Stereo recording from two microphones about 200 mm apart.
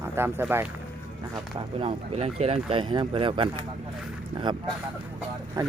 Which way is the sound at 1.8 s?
30° right (ahead or behind).